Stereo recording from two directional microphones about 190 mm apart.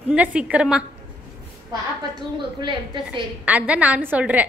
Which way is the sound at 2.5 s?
25° right (ahead or behind).